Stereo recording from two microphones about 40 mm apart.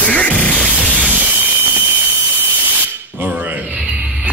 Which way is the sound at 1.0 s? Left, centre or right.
Right.